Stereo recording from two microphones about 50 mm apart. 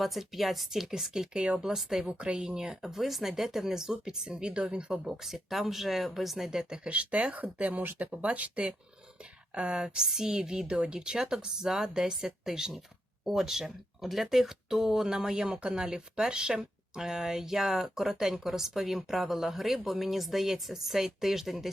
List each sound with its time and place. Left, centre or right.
0.0 s speech: centre
1.6 s speech: centre
2.0 s speech: right
6.8 s speech: right; by 21.7 s centre